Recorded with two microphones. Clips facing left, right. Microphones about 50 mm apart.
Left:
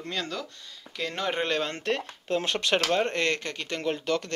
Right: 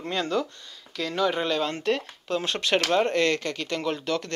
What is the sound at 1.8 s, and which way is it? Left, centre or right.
Speech, left.